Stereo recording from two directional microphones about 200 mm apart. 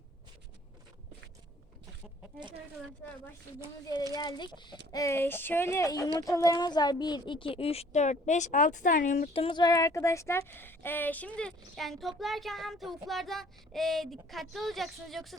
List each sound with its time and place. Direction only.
3.8 s speech: 20° left (ahead or behind); by 9.3 s 40° left (ahead or behind)
9.3 s speech: 25° left (ahead or behind); by 15.4 s centre (ahead or behind)